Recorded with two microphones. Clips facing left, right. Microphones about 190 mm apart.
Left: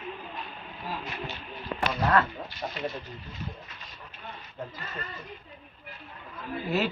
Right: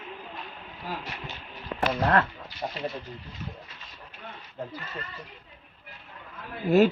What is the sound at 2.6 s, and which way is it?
Speech, 20° right (ahead or behind).